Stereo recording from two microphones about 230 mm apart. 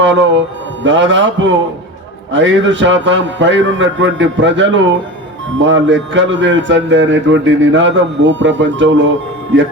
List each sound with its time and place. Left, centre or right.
0.0 s a man's voice: right